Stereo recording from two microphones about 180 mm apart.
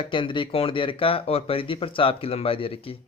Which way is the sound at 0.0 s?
30° left (ahead or behind).